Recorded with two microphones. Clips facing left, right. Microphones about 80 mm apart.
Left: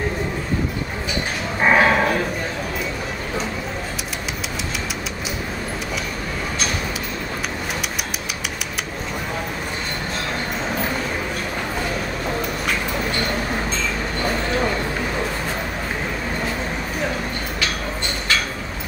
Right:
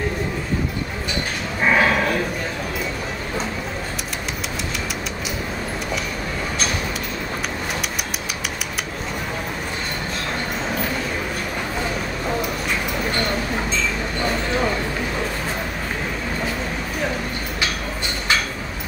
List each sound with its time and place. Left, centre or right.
1.7 s dog: left